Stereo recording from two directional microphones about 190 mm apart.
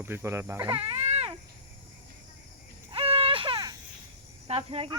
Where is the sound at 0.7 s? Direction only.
30° right (ahead or behind).